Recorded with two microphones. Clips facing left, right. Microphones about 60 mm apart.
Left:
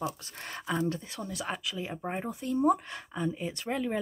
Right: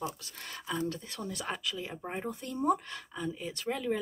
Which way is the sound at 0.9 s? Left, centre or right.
Centre.